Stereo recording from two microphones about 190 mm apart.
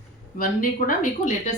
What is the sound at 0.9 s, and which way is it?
Speech, 45° left (ahead or behind).